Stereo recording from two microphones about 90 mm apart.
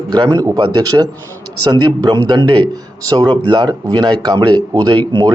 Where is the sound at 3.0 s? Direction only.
50° right (ahead or behind).